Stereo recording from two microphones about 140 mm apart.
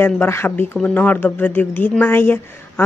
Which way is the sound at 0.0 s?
15° left (ahead or behind).